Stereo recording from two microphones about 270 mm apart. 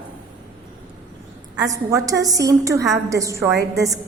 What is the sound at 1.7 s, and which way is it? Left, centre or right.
A woman's voice, centre.